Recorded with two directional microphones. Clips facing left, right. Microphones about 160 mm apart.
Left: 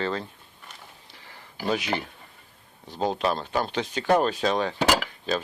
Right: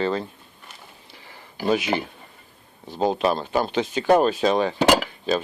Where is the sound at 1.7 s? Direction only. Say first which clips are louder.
Right 5 dB; 10° right (ahead or behind).